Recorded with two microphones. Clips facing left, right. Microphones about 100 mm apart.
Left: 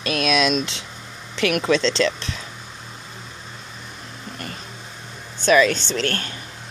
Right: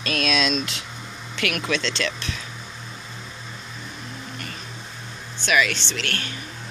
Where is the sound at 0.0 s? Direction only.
20° left (ahead or behind).